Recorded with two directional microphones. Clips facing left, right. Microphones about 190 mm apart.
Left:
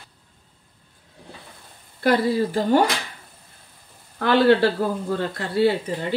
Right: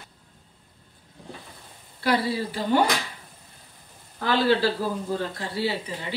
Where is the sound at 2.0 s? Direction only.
50° left (ahead or behind).